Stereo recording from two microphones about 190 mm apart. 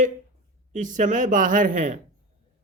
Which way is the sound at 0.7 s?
40° right (ahead or behind).